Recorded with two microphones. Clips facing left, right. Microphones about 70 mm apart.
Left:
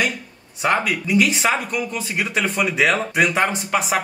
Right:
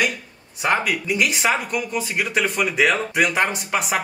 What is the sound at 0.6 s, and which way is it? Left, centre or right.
Speech, centre.